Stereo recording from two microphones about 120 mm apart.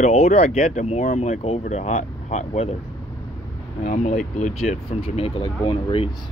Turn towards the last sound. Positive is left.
turn(degrees=45)  # may be behind; listen again after turning